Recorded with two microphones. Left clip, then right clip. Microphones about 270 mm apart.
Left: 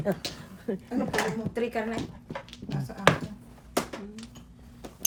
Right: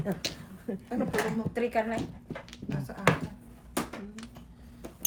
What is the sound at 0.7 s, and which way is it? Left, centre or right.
Speech, left.